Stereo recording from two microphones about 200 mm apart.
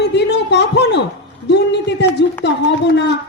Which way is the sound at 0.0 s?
60° left (ahead or behind).